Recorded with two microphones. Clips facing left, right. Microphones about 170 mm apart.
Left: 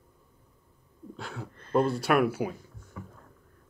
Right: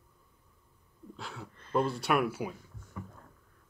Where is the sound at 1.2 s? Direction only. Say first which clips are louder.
Left 4 dB; 50° left (ahead or behind).